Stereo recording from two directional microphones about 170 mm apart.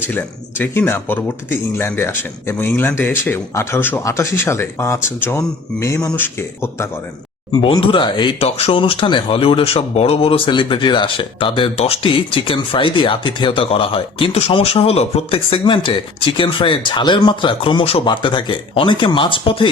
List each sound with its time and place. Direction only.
0.1 s speech: 10° left (ahead or behind)
7.5 s speech: 30° left (ahead or behind)